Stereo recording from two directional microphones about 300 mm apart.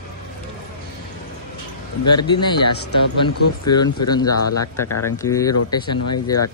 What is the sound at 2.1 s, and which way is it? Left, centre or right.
Speech, centre.